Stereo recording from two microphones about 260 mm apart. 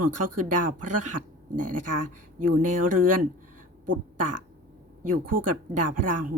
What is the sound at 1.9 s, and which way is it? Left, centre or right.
Speech, right.